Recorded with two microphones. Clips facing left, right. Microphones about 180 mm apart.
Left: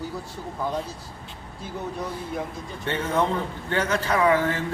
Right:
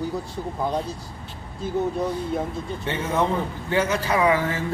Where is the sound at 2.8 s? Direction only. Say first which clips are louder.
Even; 5° right (ahead or behind).